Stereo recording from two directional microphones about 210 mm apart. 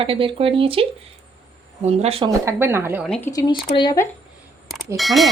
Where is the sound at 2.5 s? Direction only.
10° right (ahead or behind).